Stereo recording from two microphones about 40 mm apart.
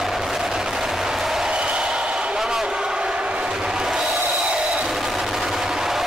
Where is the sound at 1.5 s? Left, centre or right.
Right.